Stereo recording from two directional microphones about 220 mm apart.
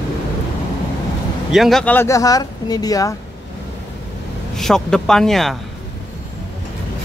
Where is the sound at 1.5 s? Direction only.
Centre (ahead or behind); by 3.1 s 15° left (ahead or behind).